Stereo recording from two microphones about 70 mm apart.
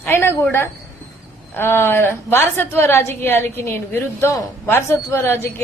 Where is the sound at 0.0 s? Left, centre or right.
Left.